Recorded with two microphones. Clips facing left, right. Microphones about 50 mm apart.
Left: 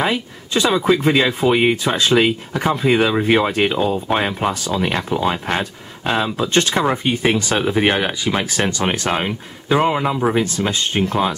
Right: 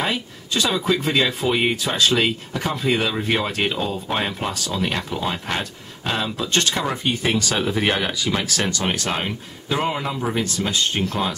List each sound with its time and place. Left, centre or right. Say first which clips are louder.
0.0 s speech: left 4 dB; centre